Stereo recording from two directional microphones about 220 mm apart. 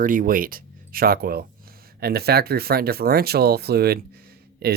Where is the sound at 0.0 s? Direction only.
40° right (ahead or behind).